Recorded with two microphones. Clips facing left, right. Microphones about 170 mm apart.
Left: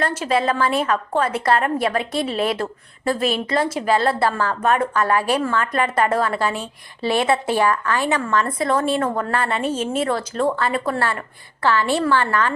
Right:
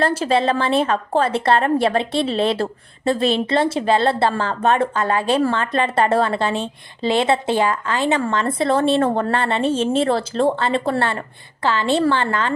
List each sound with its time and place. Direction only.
0.0 s a woman's voice: 30° right (ahead or behind)